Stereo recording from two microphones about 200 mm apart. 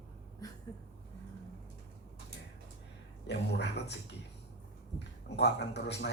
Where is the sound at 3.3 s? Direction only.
60° left (ahead or behind).